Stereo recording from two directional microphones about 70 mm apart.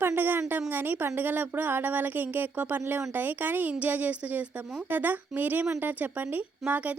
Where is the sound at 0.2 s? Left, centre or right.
Right.